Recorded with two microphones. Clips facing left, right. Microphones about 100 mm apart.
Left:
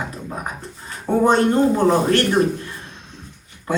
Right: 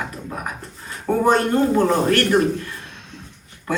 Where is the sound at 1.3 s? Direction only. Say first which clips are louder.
Left 1 dB; 25° left (ahead or behind).